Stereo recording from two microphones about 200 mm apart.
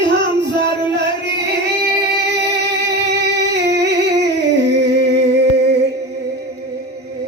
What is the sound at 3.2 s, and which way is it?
Humming, 60° right (ahead or behind).